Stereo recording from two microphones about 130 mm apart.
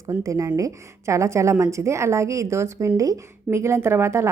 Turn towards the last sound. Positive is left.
turn(degrees=-20)  # may be behind; listen again after turning